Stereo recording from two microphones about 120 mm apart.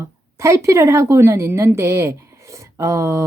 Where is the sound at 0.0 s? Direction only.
25° right (ahead or behind).